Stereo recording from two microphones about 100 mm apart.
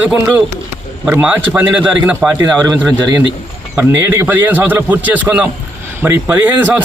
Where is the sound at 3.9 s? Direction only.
25° right (ahead or behind).